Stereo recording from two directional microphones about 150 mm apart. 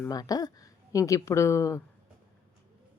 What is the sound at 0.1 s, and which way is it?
A woman's voice, 25° left (ahead or behind).